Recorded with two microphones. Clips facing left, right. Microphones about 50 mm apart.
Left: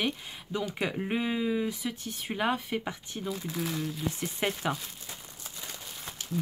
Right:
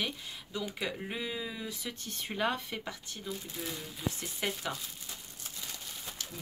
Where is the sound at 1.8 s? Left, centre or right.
Centre.